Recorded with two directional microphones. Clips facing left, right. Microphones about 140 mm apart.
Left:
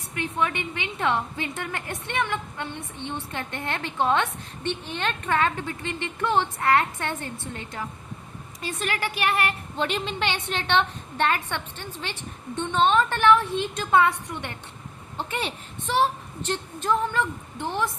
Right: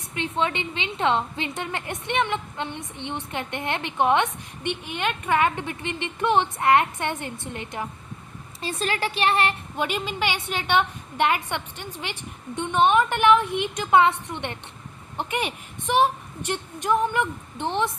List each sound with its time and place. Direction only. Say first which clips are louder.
0.1 s a woman's voice: right 1 dB; 25° right (ahead or behind)
8.6 s a woman's voice: right 2 dB; 30° right (ahead or behind)
9.7 s a woman's voice: even; 10° right (ahead or behind)